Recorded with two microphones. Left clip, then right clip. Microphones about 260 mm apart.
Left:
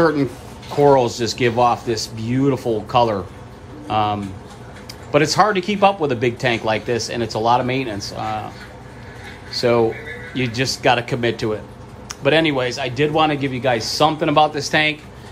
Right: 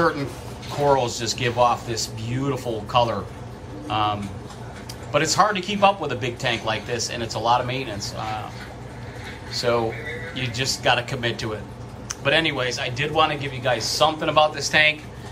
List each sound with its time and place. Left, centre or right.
0.8 s a man's voice: left
9.5 s a man's voice: left